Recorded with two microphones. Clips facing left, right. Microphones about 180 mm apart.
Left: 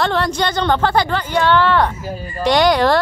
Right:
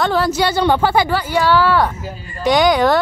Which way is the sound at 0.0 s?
5° right (ahead or behind).